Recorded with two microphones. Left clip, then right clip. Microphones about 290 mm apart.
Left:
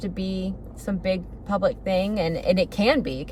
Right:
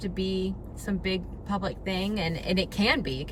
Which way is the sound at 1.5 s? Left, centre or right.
Centre.